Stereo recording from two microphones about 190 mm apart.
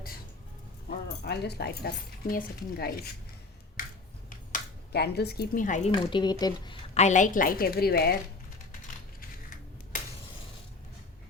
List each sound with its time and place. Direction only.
0.9 s speech: 60° left (ahead or behind)
4.9 s speech: 60° left (ahead or behind); by 5.9 s 40° left (ahead or behind)
5.9 s a woman's voice: 25° left (ahead or behind)
7.0 s a woman's voice: 40° left (ahead or behind)